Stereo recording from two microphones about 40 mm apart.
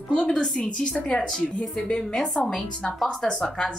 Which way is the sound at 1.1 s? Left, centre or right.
Centre.